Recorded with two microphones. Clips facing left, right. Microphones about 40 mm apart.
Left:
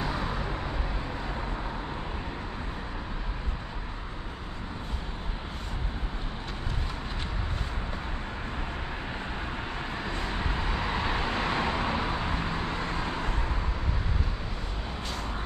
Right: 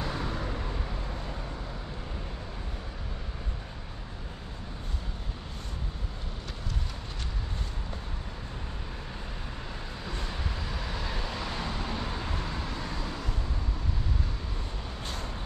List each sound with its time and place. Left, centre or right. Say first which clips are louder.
10.0 s vehicle: left 3 dB; left